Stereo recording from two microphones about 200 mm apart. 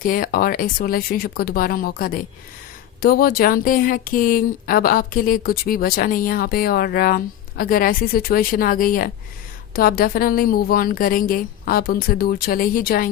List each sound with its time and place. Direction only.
0.0 s speech: 45° left (ahead or behind)